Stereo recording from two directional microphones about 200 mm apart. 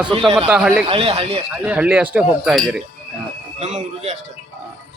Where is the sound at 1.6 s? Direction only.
5° right (ahead or behind).